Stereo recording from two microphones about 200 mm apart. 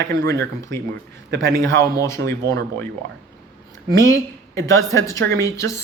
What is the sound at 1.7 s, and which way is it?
Speech, 15° left (ahead or behind).